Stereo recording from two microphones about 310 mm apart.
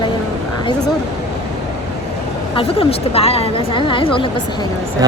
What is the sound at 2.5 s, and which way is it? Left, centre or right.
A woman's voice, centre.